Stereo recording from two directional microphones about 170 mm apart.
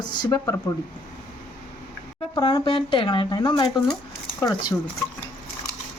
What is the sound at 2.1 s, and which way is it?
Speech, 30° left (ahead or behind).